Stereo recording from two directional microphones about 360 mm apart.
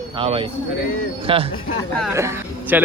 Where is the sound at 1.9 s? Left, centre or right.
Centre.